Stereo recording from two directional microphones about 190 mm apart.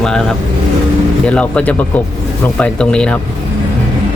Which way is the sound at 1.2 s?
5° left (ahead or behind).